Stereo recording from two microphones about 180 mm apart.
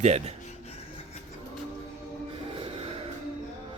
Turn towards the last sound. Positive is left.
turn(degrees=-30)  # may be behind; listen again after turning